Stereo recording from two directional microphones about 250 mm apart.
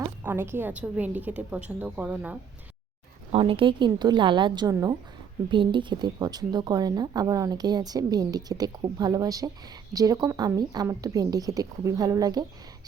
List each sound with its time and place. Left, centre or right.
0.0 s a woman's voice: centre
3.3 s a woman's voice: right